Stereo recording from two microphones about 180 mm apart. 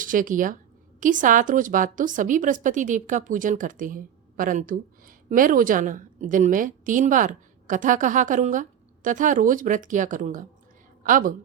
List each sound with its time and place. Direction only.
0.0 s a woman's voice: 50° right (ahead or behind)